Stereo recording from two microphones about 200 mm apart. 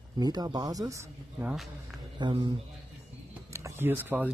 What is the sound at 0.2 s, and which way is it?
Speech, 20° right (ahead or behind).